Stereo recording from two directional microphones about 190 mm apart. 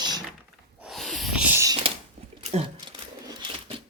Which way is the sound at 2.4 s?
35° right (ahead or behind).